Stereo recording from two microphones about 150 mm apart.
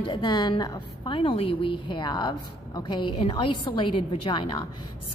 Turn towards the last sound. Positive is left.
turn(degrees=30)  # may be behind; listen again after turning